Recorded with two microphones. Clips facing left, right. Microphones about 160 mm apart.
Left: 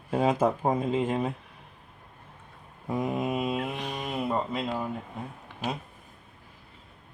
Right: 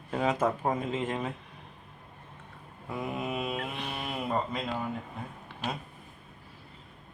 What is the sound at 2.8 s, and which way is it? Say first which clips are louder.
Mantra: left 6 dB; 40° left (ahead or behind).